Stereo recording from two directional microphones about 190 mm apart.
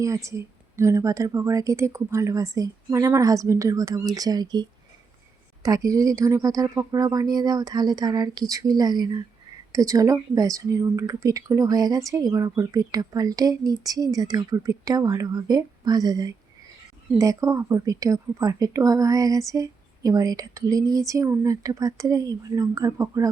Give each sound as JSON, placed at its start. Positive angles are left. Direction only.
{"t": 0.0, "sound": "a woman's voice", "side_deg": -15}
{"t": 5.6, "sound": "a woman's voice", "side_deg": -20}